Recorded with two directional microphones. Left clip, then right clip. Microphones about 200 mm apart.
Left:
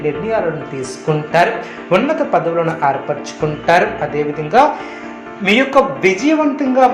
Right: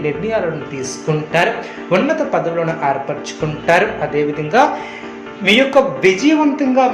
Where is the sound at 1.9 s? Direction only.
10° left (ahead or behind).